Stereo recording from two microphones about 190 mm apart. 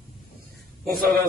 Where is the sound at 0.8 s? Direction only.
50° right (ahead or behind).